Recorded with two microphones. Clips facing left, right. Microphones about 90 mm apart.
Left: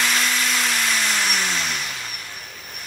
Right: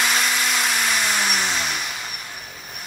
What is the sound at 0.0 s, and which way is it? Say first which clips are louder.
Vehicle: right 1 dB; 10° right (ahead or behind).